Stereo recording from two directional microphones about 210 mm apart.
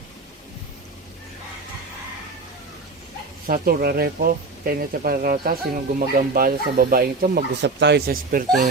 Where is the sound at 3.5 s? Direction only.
45° right (ahead or behind).